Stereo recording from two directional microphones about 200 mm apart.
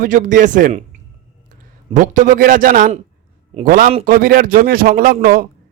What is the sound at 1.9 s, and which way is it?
A man's voice, 40° right (ahead or behind).